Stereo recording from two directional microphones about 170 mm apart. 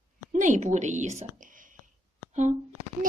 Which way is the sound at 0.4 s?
45° right (ahead or behind).